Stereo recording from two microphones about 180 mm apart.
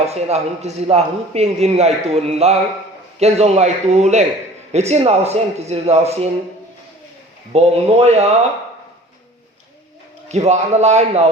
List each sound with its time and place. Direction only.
0.0 s a man's voice: 35° right (ahead or behind)
7.5 s a man's voice: 35° right (ahead or behind)
10.2 s a man's voice: 40° right (ahead or behind)